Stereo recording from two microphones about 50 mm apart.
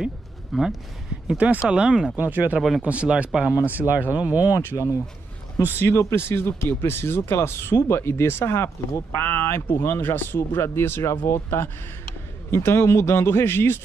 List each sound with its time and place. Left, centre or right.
0.5 s speech: centre
1.4 s speech: right
2.1 s speech: right
3.3 s speech: centre
3.7 s speech: right
5.8 s a man's voice: left